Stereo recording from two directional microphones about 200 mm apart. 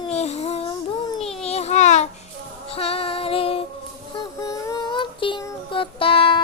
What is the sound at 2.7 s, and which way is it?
Female singing, 30° left (ahead or behind).